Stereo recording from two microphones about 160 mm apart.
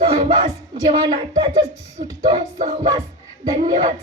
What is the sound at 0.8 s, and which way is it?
Speech, 30° right (ahead or behind).